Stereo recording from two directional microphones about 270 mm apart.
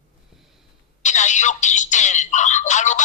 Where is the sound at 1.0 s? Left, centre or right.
Left.